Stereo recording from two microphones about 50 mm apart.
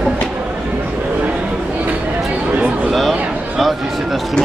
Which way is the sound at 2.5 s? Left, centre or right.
Right.